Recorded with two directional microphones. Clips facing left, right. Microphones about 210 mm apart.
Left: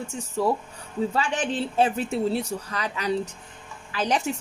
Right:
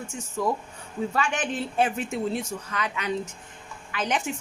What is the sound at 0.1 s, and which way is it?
Speech, 35° left (ahead or behind).